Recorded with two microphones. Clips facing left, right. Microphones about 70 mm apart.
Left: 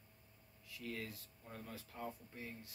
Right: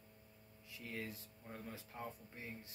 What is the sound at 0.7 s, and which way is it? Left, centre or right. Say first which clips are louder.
Speech: left 1 dB; right.